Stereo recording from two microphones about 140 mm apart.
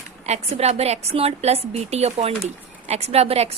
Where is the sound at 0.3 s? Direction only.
50° right (ahead or behind).